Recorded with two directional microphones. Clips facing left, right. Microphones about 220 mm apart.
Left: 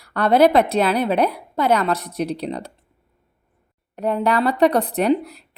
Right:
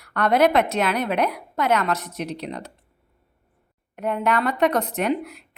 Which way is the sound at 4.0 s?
35° left (ahead or behind).